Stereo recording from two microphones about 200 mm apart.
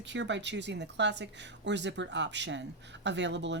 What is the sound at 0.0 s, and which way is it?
Speech, 65° right (ahead or behind).